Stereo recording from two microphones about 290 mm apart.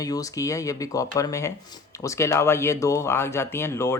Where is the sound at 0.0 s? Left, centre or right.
Centre.